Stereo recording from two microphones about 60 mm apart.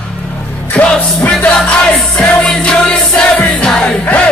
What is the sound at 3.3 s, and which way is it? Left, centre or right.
Music, left.